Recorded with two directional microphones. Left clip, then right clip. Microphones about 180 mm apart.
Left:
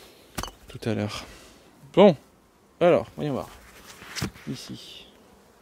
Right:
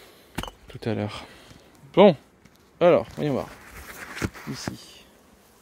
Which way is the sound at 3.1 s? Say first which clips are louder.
Right 3 dB; 20° right (ahead or behind).